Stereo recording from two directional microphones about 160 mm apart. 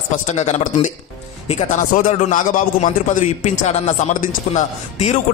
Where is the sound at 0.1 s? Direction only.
45° left (ahead or behind).